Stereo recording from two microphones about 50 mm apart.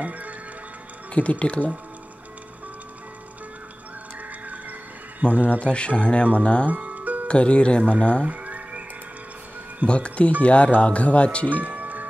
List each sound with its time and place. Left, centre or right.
0.0 s music: right
1.1 s speech: left
5.2 s speech: right
5.5 s speech: left
6.7 s music: right
7.2 s speech: left
8.2 s a sound: right
9.8 s speech: left
11.6 s music: right